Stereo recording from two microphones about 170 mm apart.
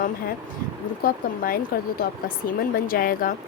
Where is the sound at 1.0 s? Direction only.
60° left (ahead or behind).